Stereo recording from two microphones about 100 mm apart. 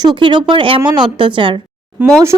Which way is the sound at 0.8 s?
45° right (ahead or behind).